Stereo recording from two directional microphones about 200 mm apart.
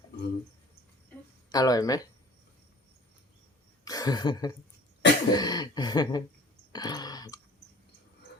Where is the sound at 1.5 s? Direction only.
20° left (ahead or behind).